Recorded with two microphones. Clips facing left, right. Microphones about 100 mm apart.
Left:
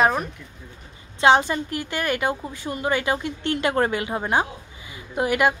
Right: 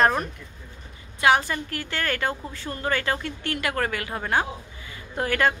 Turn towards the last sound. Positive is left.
turn(degrees=15)  # may be behind; listen again after turning